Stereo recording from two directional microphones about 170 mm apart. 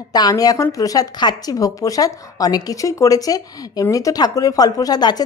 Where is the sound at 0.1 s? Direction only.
20° left (ahead or behind).